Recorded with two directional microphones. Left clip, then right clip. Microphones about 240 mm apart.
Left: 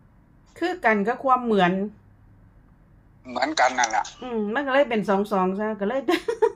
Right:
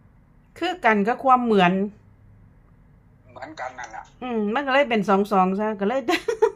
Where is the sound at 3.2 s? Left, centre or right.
Left.